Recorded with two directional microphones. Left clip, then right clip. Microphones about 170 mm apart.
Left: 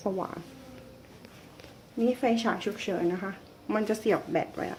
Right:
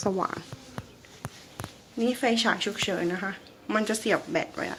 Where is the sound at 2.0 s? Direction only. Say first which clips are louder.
Right 2 dB; centre (ahead or behind).